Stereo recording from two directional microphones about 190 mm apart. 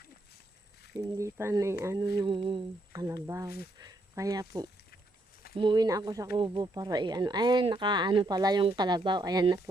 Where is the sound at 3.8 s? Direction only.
20° right (ahead or behind).